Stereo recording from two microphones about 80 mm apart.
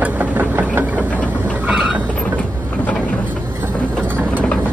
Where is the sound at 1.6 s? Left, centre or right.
Centre.